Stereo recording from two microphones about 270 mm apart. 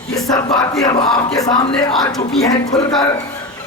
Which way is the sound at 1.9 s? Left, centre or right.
Centre.